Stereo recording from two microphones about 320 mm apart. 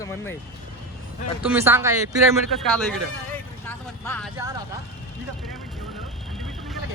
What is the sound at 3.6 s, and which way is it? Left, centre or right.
Vehicle, centre.